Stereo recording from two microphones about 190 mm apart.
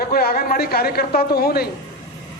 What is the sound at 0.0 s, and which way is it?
A man's voice, 55° left (ahead or behind).